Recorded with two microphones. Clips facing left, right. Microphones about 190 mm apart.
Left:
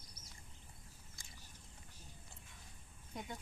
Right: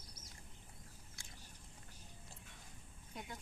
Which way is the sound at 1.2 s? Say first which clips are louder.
Right 3 dB; 65° right (ahead or behind).